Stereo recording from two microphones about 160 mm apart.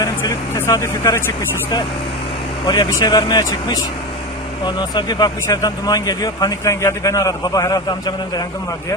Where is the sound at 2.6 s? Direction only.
25° left (ahead or behind).